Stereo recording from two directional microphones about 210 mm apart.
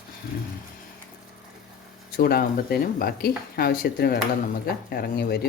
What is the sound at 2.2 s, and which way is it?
Speech, 45° left (ahead or behind).